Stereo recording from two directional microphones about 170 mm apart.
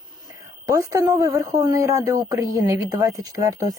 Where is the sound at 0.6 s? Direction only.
20° right (ahead or behind).